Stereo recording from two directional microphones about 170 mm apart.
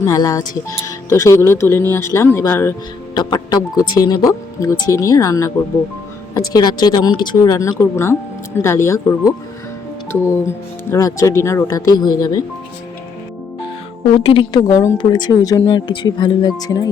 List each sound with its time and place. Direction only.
0.0 s speech: 20° left (ahead or behind)
3.2 s a woman's voice: 25° left (ahead or behind)
14.2 s a woman's voice: 30° left (ahead or behind)